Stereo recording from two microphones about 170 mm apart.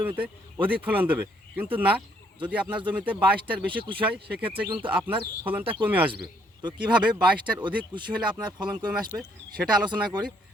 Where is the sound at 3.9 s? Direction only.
30° right (ahead or behind).